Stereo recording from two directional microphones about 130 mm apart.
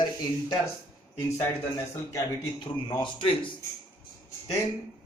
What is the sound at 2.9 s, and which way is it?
Speech, 40° left (ahead or behind).